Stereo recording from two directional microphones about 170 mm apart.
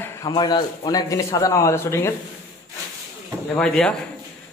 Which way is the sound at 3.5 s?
5° left (ahead or behind).